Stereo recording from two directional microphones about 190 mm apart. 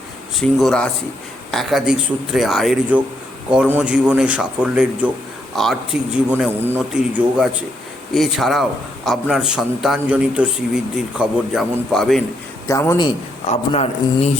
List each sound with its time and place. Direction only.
0.3 s a man's voice: centre (ahead or behind)
12.6 s a man's voice: 15° left (ahead or behind)
13.5 s a man's voice: 40° left (ahead or behind)